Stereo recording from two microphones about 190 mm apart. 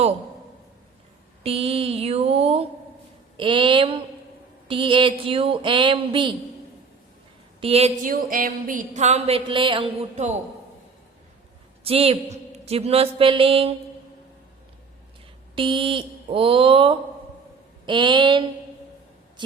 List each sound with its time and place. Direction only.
1.5 s mantra: 30° right (ahead or behind)
3.3 s speech: 25° right (ahead or behind)
7.6 s a sound: 30° right (ahead or behind)
11.8 s a woman's voice: 30° right (ahead or behind)
15.5 s speech: 25° right (ahead or behind)